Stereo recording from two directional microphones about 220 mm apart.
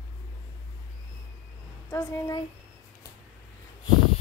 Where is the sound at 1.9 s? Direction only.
10° left (ahead or behind).